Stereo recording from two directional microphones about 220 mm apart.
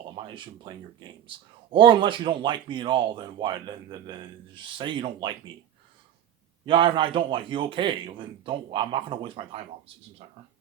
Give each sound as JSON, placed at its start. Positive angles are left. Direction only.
{"t": 0.2, "sound": "speech", "side_deg": -20}
{"t": 6.7, "sound": "speech", "side_deg": -25}